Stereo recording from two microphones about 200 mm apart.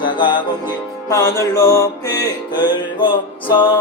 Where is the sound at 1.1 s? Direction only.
15° left (ahead or behind).